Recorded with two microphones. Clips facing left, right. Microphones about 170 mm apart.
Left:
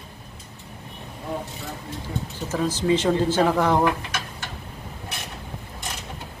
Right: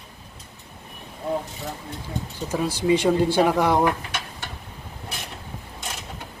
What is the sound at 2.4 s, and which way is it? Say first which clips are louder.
A woman's voice: right 1 dB; 10° right (ahead or behind).